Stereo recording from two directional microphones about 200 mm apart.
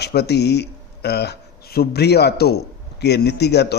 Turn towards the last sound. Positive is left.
turn(degrees=55)  # may be behind; listen again after turning